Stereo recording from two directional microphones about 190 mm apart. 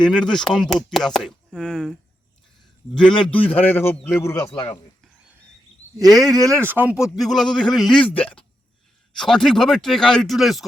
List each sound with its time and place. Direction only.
0.0 s a man's voice: 5° left (ahead or behind)
6.0 s speech: 20° right (ahead or behind); by 10.7 s centre (ahead or behind)